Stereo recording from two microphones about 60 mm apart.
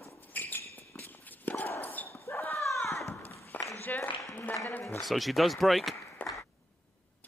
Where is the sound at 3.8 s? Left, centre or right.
Left.